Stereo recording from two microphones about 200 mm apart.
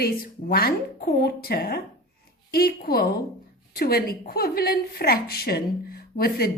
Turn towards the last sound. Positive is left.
turn(degrees=50)  # may be behind; listen again after turning